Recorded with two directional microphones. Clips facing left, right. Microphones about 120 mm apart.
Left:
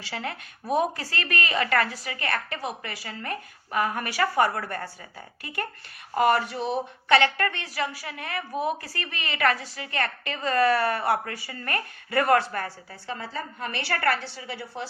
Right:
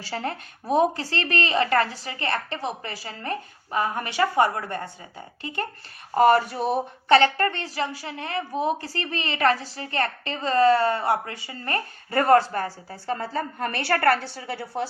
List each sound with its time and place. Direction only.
0.0 s a woman's voice: 35° right (ahead or behind)
6.1 s a woman's voice: 40° right (ahead or behind)
7.1 s a woman's voice: 35° right (ahead or behind)
13.1 s a woman's voice: 45° right (ahead or behind)